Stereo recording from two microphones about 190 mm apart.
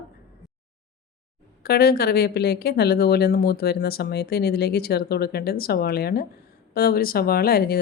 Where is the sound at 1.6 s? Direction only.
55° left (ahead or behind).